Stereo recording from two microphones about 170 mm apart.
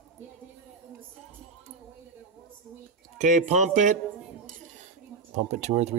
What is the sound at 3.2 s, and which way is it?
Speech, 45° right (ahead or behind).